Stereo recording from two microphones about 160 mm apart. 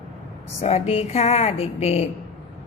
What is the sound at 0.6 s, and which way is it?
A woman's voice, 40° left (ahead or behind).